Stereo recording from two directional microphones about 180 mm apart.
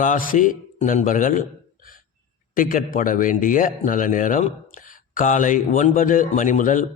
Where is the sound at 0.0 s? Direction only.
45° left (ahead or behind).